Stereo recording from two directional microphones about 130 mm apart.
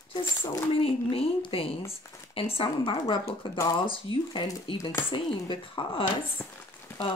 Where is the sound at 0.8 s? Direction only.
45° left (ahead or behind).